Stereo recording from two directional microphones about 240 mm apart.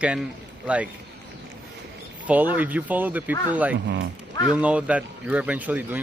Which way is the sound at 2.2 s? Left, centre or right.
Centre.